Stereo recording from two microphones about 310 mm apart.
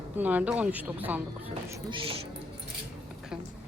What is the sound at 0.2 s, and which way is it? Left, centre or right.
A woman's voice, centre.